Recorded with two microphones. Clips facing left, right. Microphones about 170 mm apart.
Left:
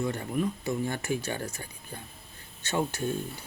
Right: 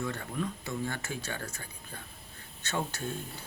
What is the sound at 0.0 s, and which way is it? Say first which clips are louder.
Speech: left 5 dB; 30° left (ahead or behind).